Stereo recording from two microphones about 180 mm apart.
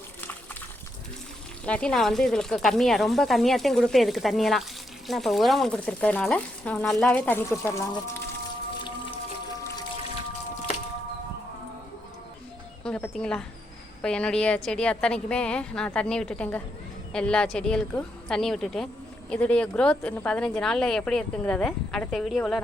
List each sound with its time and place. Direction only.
1.6 s a woman's voice: 5° left (ahead or behind)
12.8 s a woman's voice: 5° left (ahead or behind)